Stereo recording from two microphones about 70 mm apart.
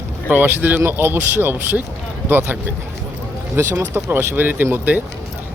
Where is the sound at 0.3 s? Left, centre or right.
Right.